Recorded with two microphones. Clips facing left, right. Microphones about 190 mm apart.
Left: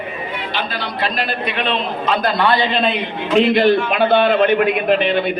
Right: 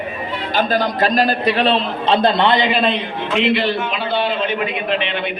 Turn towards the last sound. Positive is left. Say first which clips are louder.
# left 5 dB
turn(degrees=40)  # may be behind; listen again after turning